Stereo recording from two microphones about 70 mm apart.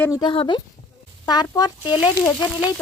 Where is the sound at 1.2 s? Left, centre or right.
Left.